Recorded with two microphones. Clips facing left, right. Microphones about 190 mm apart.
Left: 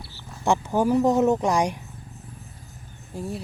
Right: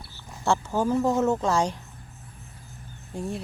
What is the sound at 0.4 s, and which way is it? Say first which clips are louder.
Speech: left 3 dB; 15° left (ahead or behind).